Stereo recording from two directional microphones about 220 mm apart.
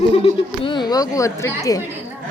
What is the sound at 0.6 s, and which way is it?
Speech, 20° left (ahead or behind).